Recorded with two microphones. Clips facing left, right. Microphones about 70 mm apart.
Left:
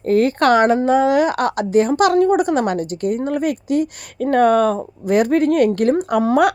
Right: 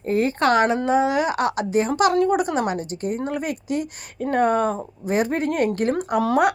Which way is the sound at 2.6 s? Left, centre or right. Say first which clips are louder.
Left 5 dB; left.